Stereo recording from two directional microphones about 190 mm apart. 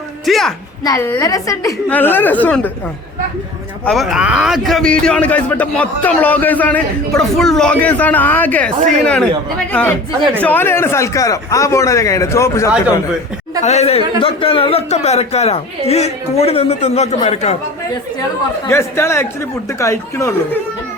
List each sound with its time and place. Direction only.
0.3 s a woman's voice: centre (ahead or behind)
0.9 s speech: 15° left (ahead or behind)
3.8 s speech: centre (ahead or behind)
10.4 s speech: 10° left (ahead or behind)
13.6 s speech: 35° left (ahead or behind)
18.7 s speech: 15° left (ahead or behind)